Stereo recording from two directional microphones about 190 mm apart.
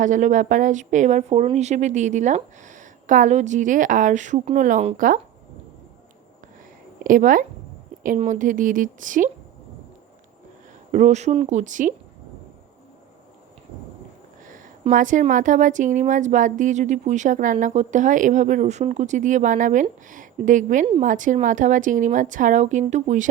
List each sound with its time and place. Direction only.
0.0 s a woman's voice: 40° right (ahead or behind)
7.0 s a woman's voice: 45° right (ahead or behind)
10.9 s a woman's voice: 35° right (ahead or behind)
14.4 s a woman's voice: 45° right (ahead or behind)